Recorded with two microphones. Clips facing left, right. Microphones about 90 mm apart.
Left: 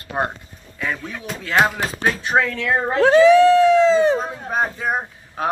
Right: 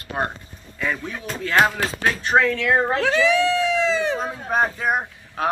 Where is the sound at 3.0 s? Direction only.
40° left (ahead or behind).